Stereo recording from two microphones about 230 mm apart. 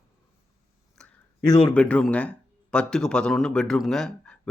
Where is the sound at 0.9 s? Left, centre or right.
Centre.